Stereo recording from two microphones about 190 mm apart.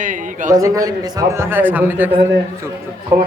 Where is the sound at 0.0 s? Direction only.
45° right (ahead or behind).